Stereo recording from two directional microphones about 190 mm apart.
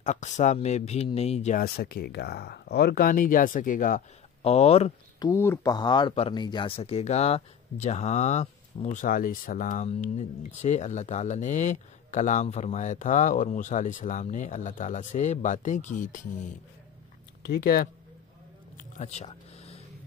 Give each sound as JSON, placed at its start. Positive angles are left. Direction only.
{"t": 0.0, "sound": "speech", "side_deg": 40}
{"t": 1.6, "sound": "speech", "side_deg": 55}
{"t": 4.4, "sound": "speech", "side_deg": 35}
{"t": 5.2, "sound": "speech", "side_deg": 15}
{"t": 9.0, "sound": "speech", "side_deg": 50}
{"t": 17.4, "sound": "speech", "side_deg": 50}
{"t": 18.8, "sound": "a sound", "side_deg": 40}